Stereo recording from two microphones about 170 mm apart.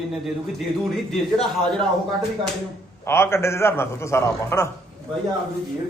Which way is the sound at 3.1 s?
15° left (ahead or behind).